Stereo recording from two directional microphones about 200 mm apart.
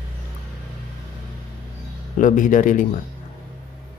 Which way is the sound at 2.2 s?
40° left (ahead or behind).